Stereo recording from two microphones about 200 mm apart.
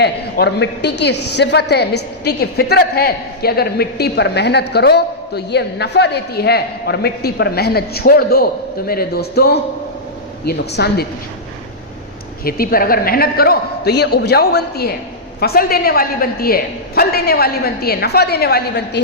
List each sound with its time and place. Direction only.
0.0 s a woman's voice: 55° left (ahead or behind)
12.5 s a woman's voice: 45° left (ahead or behind)